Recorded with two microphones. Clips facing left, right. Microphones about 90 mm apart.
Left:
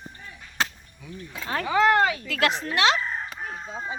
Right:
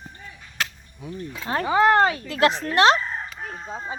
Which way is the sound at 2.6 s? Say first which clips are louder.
Right 5 dB; 45° right (ahead or behind).